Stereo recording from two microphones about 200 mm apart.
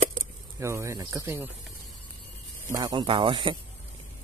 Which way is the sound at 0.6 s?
15° right (ahead or behind).